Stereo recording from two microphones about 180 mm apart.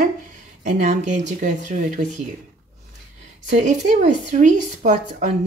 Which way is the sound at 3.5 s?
40° right (ahead or behind).